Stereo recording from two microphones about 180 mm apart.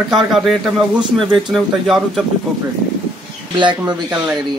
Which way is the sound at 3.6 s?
25° right (ahead or behind).